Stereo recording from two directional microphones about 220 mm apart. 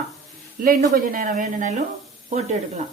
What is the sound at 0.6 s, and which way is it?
Speech, 40° right (ahead or behind).